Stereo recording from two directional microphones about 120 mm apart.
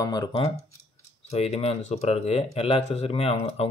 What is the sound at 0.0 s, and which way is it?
Speech, 35° left (ahead or behind).